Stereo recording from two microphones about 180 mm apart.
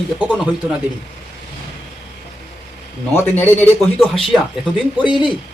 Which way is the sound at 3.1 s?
10° left (ahead or behind).